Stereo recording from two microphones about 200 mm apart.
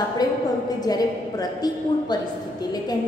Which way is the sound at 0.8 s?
20° left (ahead or behind).